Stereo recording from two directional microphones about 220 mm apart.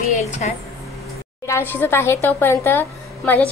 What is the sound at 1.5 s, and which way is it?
A woman's voice, 10° left (ahead or behind).